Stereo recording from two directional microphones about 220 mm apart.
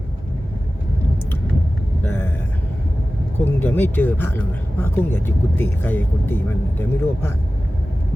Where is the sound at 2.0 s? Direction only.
10° left (ahead or behind).